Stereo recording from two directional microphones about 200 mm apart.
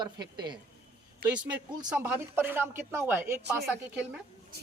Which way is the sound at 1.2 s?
10° right (ahead or behind).